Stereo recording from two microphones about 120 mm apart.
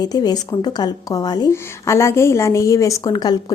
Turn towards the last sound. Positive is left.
turn(degrees=35)  # may be behind; listen again after turning